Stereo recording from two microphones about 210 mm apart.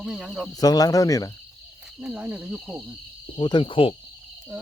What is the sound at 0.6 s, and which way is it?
Speech, 15° left (ahead or behind).